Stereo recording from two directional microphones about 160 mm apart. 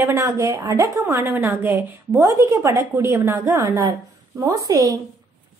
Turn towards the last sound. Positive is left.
turn(degrees=-20)  # may be behind; listen again after turning